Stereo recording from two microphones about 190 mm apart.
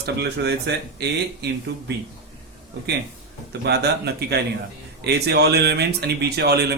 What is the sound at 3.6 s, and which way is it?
Speech, 60° right (ahead or behind).